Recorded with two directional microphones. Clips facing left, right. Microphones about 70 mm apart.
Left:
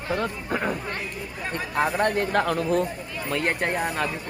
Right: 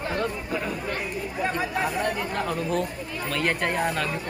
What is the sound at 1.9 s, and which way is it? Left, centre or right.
Speech, left.